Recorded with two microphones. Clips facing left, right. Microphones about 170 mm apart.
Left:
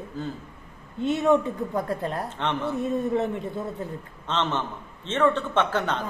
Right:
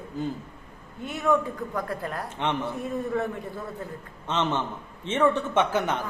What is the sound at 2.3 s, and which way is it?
Speech, 15° right (ahead or behind).